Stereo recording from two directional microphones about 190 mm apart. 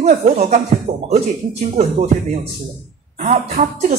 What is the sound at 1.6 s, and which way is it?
Speech, 35° right (ahead or behind).